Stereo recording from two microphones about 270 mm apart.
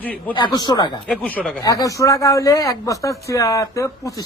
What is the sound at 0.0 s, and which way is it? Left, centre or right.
Speech, centre.